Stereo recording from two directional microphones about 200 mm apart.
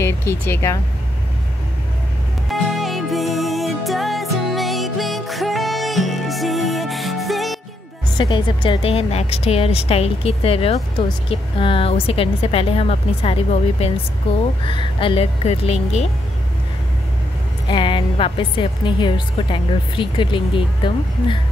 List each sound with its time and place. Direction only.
0.0 s speech: 10° left (ahead or behind)
2.7 s music: centre (ahead or behind)
8.2 s speech: 25° left (ahead or behind)
17.6 s speech: 25° left (ahead or behind)